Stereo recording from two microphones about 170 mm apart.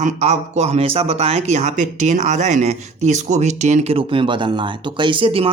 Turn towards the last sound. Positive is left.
turn(degrees=-30)  # may be behind; listen again after turning